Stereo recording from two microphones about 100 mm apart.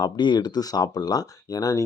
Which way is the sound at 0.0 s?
45° left (ahead or behind).